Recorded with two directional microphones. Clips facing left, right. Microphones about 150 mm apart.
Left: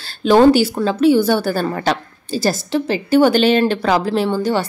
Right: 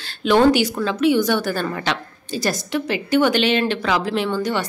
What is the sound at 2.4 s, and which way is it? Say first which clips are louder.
A woman's voice: left 4 dB; 30° left (ahead or behind).